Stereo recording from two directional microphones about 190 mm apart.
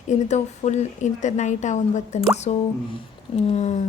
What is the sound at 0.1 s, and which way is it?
Speech, 35° left (ahead or behind).